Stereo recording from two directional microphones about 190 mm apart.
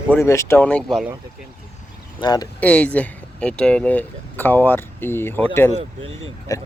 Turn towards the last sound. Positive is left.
turn(degrees=15)  # may be behind; listen again after turning